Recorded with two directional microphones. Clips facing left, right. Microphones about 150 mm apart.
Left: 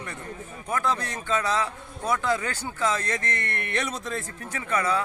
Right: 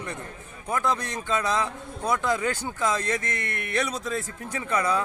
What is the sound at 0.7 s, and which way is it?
A man's voice, 15° right (ahead or behind).